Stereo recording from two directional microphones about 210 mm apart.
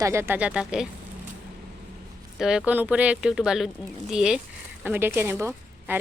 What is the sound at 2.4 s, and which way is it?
Speech, 5° right (ahead or behind).